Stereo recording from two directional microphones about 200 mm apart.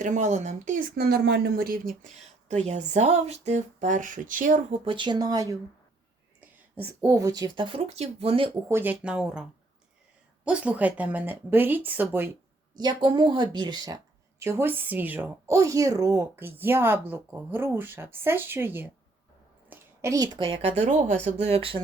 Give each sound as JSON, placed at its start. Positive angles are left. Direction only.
{"t": 0.0, "sound": "speech", "side_deg": -35}
{"t": 4.9, "sound": "speech", "side_deg": -25}
{"t": 8.7, "sound": "speech", "side_deg": -10}
{"t": 12.7, "sound": "a woman's voice", "side_deg": -20}